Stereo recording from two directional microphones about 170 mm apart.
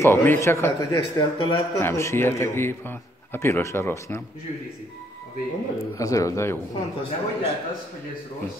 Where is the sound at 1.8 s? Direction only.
15° left (ahead or behind).